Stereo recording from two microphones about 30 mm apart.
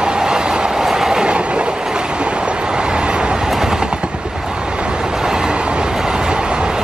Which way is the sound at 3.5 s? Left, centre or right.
Centre.